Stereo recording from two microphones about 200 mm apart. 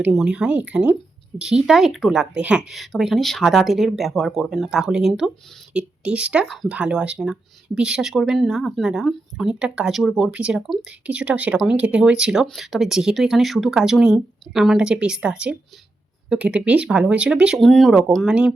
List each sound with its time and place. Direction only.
0.0 s speech: 5° right (ahead or behind)